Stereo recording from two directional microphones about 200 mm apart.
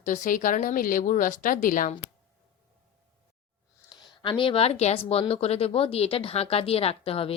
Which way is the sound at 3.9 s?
25° left (ahead or behind).